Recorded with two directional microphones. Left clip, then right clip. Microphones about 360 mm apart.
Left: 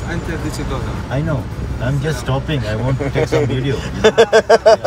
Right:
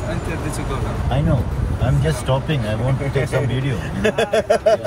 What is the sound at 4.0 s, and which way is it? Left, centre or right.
Speech, centre.